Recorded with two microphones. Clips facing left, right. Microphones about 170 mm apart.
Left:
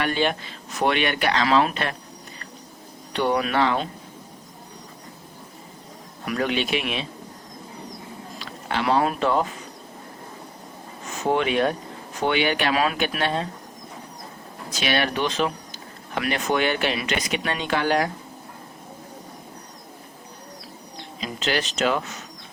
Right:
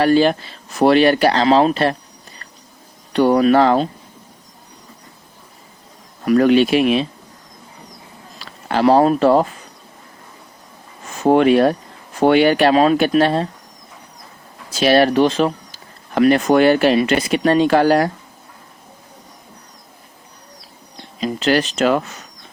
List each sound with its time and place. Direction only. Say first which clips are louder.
0.0 s speech: right 10 dB; 35° right (ahead or behind)
3.1 s speech: right 10 dB; 40° right (ahead or behind)
6.3 s speech: right 12 dB; 40° right (ahead or behind)
8.4 s speech: right 9 dB; 35° right (ahead or behind)
11.2 s speech: right 9 dB; 45° right (ahead or behind)
14.7 s speech: right 11 dB; 35° right (ahead or behind)
21.2 s speech: right 9 dB; 45° right (ahead or behind)